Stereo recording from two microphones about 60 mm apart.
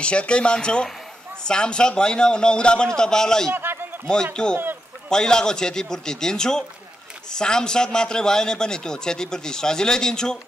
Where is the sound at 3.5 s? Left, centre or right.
Right.